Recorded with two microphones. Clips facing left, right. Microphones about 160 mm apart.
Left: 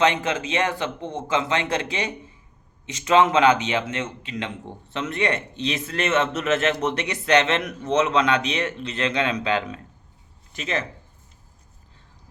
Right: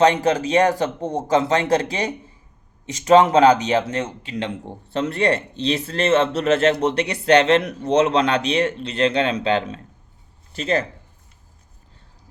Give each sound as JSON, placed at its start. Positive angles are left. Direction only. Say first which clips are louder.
{"t": 0.0, "sound": "speech", "louder": "right 5 dB", "side_deg": -35}